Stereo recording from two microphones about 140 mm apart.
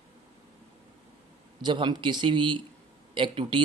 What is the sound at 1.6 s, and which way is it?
Speech, 35° right (ahead or behind).